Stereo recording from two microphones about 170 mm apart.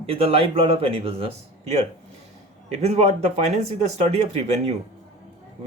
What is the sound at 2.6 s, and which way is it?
Speech, 40° right (ahead or behind).